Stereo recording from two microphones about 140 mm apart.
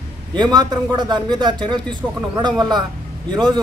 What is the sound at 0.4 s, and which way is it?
Speech, 30° right (ahead or behind).